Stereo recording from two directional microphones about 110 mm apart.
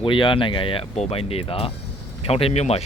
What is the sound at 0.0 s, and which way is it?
Speech, 50° left (ahead or behind).